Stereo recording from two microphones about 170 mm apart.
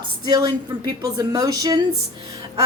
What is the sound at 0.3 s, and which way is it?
A woman's voice, 25° right (ahead or behind).